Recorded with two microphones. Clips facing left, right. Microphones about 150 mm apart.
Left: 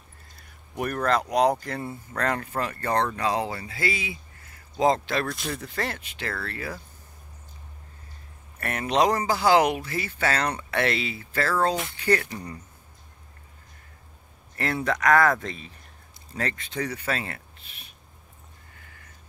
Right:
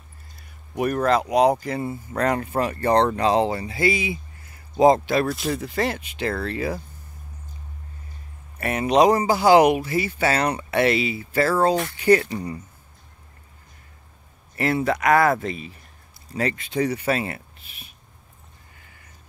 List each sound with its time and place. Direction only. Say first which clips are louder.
0.7 s speech: right 4 dB; 10° right (ahead or behind)
5.6 s speech: right 6 dB; 15° right (ahead or behind)
8.5 s speech: right 5 dB; 15° right (ahead or behind)
14.6 s speech: right 4 dB; 5° right (ahead or behind)